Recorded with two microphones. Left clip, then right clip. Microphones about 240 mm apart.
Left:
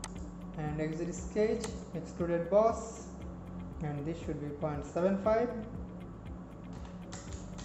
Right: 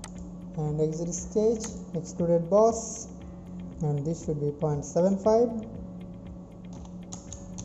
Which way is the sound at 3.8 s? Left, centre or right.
Centre.